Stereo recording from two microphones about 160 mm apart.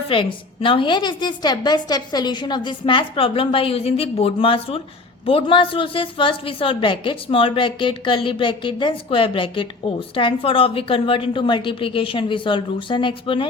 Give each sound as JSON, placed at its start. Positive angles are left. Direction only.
{"t": 0.1, "sound": "a woman's voice", "side_deg": 30}